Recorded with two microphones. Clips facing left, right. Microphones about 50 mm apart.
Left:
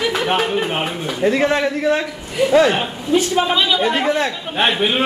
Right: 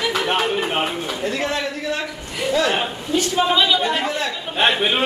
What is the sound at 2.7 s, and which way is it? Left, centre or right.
A man's voice, centre.